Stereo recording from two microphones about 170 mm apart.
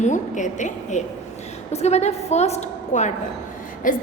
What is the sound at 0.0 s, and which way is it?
A woman's voice, 45° left (ahead or behind).